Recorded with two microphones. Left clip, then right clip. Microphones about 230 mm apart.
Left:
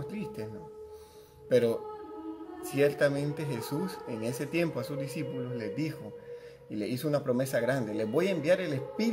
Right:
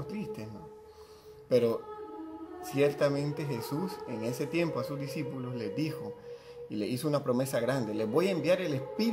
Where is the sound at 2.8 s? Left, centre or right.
Centre.